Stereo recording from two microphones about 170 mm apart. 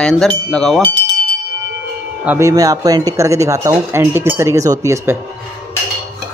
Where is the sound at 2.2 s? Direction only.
15° right (ahead or behind).